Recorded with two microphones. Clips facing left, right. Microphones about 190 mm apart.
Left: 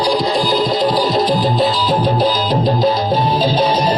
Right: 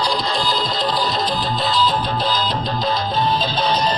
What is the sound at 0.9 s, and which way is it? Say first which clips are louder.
Music: left 6 dB; 40° left (ahead or behind).